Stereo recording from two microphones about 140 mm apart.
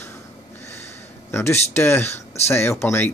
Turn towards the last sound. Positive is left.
turn(degrees=15)  # may be behind; listen again after turning